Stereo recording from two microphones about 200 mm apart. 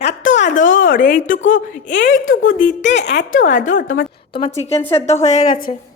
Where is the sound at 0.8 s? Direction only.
45° left (ahead or behind).